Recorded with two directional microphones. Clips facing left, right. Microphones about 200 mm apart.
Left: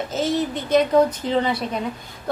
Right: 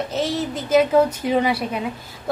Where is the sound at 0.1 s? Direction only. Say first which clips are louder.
Left 1 dB; centre (ahead or behind).